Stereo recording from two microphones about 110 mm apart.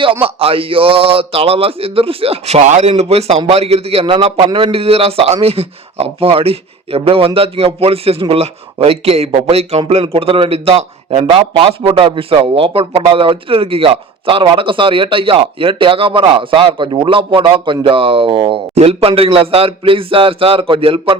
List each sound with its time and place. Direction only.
0.0 s a man's voice: 55° right (ahead or behind); by 2.9 s 85° right
3.0 s a man's voice: 70° right (ahead or behind); by 18.6 s 50° right (ahead or behind)
18.7 s a man's voice: 70° right (ahead or behind); by 21.2 s 55° right (ahead or behind)